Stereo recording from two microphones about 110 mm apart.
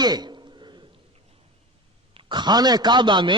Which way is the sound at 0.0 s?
40° right (ahead or behind).